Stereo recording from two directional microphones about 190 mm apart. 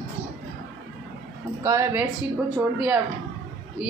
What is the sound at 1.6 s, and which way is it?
Speech, 15° right (ahead or behind).